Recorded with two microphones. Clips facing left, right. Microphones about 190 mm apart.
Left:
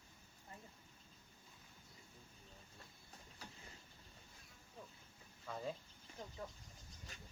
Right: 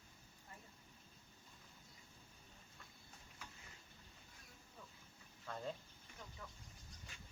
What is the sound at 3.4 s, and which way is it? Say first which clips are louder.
Boat: left 2 dB; 35° left (ahead or behind).